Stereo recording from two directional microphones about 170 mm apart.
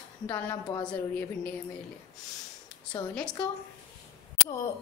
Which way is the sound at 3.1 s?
5° left (ahead or behind).